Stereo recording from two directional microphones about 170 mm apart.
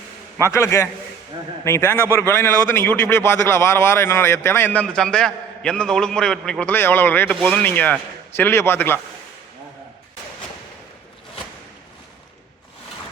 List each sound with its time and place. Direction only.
0.4 s a man's voice: 15° left (ahead or behind)